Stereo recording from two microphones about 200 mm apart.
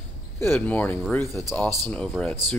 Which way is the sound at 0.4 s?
10° left (ahead or behind).